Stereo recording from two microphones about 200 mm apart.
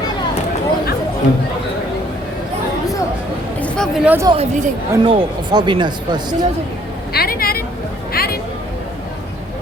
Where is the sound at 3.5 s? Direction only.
5° left (ahead or behind).